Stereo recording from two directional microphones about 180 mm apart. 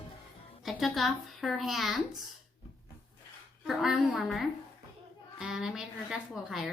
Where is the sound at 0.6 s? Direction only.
Centre (ahead or behind).